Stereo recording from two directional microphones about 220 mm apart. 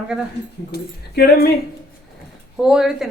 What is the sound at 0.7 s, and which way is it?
Speech, 45° left (ahead or behind).